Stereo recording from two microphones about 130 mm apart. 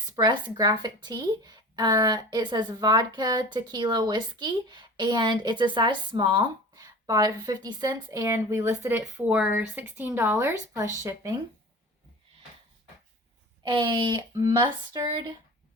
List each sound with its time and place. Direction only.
0.2 s speech: 35° right (ahead or behind)
13.6 s speech: 35° right (ahead or behind)